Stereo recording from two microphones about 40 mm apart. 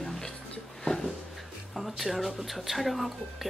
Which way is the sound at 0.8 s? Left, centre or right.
Centre.